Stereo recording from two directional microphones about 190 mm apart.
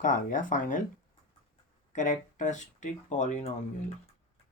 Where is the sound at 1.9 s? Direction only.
40° left (ahead or behind).